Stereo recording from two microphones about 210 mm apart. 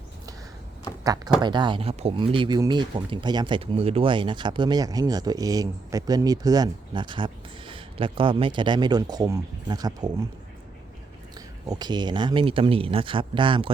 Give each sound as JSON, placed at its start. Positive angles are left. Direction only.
{"t": 1.0, "sound": "speech", "side_deg": -15}
{"t": 11.3, "sound": "speech", "side_deg": -20}